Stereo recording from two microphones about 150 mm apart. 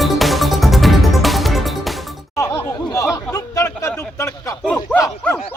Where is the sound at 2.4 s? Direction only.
20° left (ahead or behind).